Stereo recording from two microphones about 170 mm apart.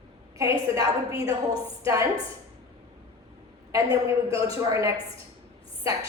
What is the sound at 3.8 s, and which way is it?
Speech, 30° left (ahead or behind).